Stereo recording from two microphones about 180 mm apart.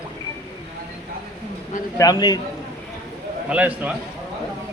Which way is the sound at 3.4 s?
10° right (ahead or behind).